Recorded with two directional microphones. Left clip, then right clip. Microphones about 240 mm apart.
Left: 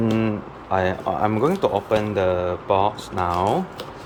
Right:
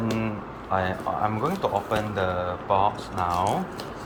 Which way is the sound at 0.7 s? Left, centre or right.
Left.